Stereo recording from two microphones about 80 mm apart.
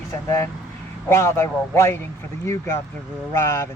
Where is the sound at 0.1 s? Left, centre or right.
Left.